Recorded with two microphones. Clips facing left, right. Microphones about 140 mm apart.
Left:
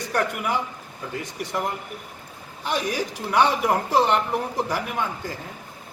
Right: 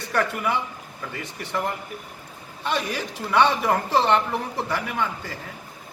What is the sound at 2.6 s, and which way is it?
Speech, 10° left (ahead or behind).